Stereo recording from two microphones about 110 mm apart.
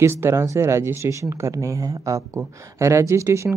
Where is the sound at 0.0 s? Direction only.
25° right (ahead or behind).